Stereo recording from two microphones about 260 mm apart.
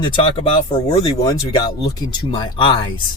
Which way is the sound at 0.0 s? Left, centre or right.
Centre.